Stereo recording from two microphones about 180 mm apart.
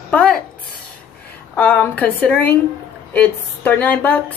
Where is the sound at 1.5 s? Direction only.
10° left (ahead or behind).